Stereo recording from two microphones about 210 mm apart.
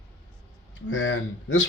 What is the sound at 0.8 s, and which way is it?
Speech, 65° left (ahead or behind).